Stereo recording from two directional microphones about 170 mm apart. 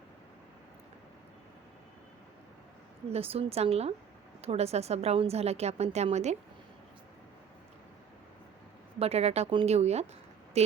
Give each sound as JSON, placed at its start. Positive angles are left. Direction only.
{"t": 3.1, "sound": "a woman's voice", "side_deg": -35}
{"t": 9.0, "sound": "a woman's voice", "side_deg": -40}